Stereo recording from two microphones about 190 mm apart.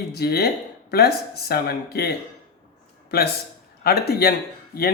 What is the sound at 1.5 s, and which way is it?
Speech, 55° left (ahead or behind).